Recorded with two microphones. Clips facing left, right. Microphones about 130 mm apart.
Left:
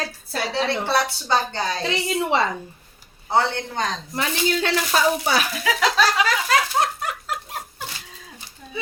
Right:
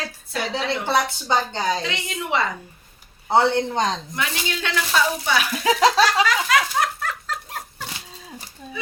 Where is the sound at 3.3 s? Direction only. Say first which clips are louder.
Right 3 dB; 25° right (ahead or behind).